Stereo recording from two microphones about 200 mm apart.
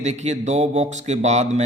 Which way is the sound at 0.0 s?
35° right (ahead or behind).